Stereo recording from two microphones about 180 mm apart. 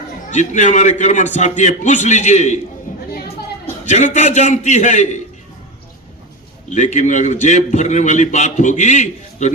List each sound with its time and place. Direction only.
0.3 s a man's voice: 40° left (ahead or behind)
2.9 s chatter: 45° left (ahead or behind)
3.8 s a man's voice: 40° left (ahead or behind)
6.7 s a man's voice: 40° left (ahead or behind)